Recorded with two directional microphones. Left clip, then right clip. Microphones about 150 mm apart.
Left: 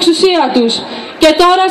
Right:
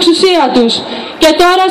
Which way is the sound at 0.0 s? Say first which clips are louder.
Right 2 dB; 35° left (ahead or behind).